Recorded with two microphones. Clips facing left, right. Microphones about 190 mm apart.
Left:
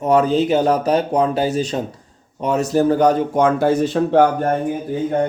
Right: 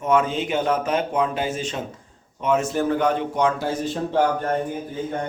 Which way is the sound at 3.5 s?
55° left (ahead or behind).